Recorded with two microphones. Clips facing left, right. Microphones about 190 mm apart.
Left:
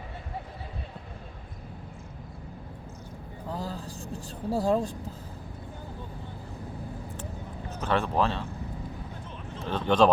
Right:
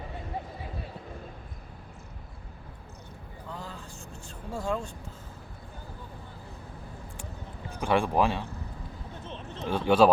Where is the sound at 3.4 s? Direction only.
35° left (ahead or behind).